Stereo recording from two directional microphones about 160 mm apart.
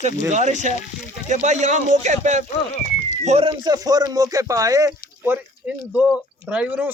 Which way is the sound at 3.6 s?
25° right (ahead or behind).